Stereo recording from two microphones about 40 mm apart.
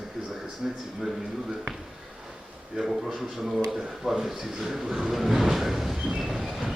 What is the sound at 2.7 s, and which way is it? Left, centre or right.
A man's voice, centre.